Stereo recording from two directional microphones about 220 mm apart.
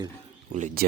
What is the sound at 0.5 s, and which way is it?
Speech, 35° right (ahead or behind).